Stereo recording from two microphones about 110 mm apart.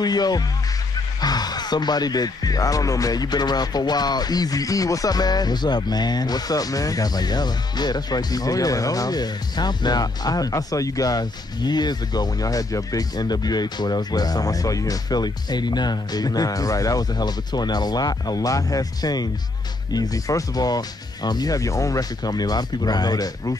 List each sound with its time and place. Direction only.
0.0 s speech: 35° left (ahead or behind)